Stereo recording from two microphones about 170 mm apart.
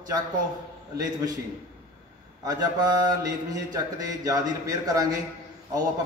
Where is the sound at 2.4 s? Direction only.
20° right (ahead or behind).